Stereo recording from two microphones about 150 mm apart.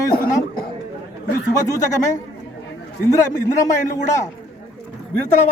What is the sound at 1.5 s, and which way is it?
A man's voice, 20° left (ahead or behind).